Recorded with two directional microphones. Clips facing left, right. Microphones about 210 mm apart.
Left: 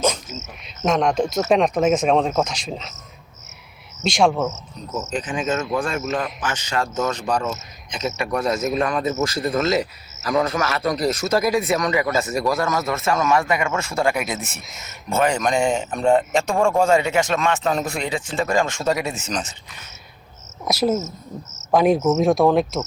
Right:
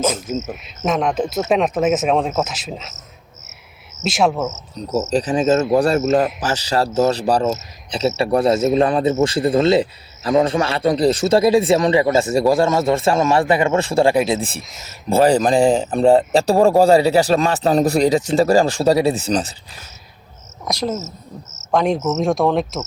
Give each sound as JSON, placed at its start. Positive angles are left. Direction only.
{"t": 0.3, "sound": "speech", "side_deg": -50}
{"t": 0.8, "sound": "speech", "side_deg": -5}
{"t": 4.0, "sound": "speech", "side_deg": -5}
{"t": 4.9, "sound": "speech", "side_deg": -40}
{"t": 20.7, "sound": "speech", "side_deg": 5}
{"t": 21.7, "sound": "cricket", "side_deg": 5}
{"t": 22.2, "sound": "speech", "side_deg": 0}